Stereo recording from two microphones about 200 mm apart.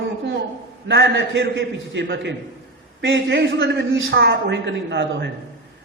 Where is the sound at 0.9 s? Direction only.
65° right (ahead or behind).